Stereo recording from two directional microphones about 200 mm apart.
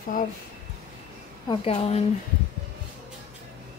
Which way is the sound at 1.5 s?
30° left (ahead or behind).